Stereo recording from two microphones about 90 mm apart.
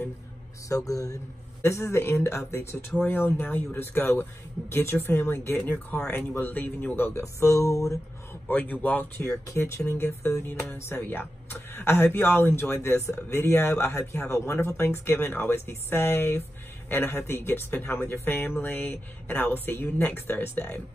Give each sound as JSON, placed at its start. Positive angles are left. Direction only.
{"t": 0.7, "sound": "speech", "side_deg": 40}
{"t": 8.5, "sound": "speech", "side_deg": 20}
{"t": 9.5, "sound": "speech", "side_deg": 30}